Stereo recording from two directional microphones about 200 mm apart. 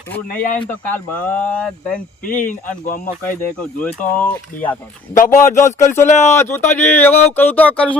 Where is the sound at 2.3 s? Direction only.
40° left (ahead or behind).